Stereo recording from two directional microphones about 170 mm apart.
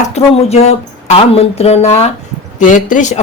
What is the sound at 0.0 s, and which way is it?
Speech, 40° left (ahead or behind).